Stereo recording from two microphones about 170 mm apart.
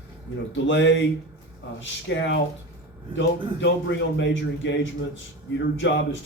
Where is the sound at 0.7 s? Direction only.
90° left.